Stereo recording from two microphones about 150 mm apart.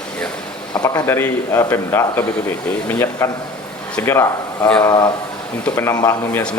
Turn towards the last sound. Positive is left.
turn(degrees=25)  # may be behind; listen again after turning